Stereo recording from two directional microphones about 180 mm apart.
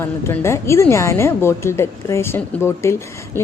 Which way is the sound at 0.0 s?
15° left (ahead or behind).